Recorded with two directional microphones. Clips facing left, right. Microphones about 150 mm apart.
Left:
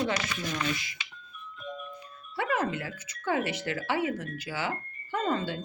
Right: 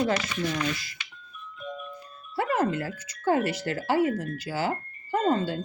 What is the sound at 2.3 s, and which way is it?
Speech, 40° right (ahead or behind).